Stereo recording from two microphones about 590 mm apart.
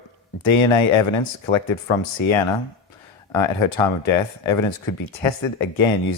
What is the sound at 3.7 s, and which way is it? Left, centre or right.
Speech, left.